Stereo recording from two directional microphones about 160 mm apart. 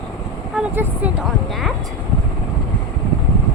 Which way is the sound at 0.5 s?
10° right (ahead or behind).